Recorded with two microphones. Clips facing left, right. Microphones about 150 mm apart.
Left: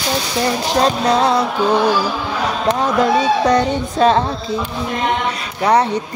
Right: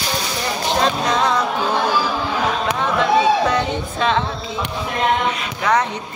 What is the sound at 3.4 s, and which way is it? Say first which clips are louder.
Speech: left 5 dB; 40° left (ahead or behind).